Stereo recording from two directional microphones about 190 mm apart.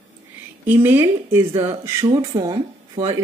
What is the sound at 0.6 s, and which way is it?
Speech, 10° right (ahead or behind).